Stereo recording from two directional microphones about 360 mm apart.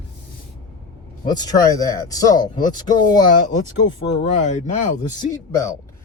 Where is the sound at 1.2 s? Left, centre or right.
Centre.